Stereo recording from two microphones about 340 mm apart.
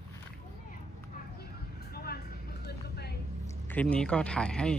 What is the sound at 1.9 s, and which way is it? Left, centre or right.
Vehicle, left.